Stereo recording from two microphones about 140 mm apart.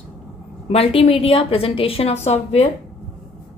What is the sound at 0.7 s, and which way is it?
A woman's voice, 45° left (ahead or behind).